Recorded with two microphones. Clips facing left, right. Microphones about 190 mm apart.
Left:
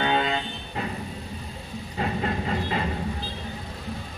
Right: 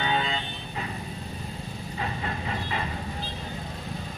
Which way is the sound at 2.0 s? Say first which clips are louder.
Left 6 dB; 35° left (ahead or behind).